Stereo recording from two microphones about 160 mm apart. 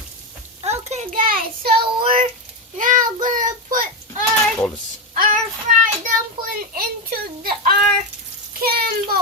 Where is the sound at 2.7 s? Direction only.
55° right (ahead or behind).